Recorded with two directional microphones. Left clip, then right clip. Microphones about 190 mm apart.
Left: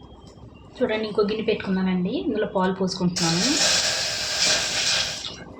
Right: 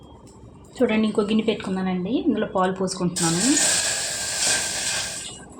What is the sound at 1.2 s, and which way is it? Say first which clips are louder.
A woman's voice: even; 35° right (ahead or behind).